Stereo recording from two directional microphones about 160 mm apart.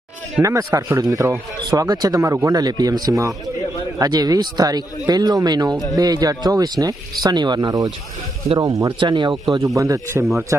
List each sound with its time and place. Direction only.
0.4 s speech: 20° right (ahead or behind)